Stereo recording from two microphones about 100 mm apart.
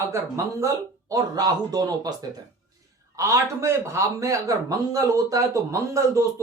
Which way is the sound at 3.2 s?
35° right (ahead or behind).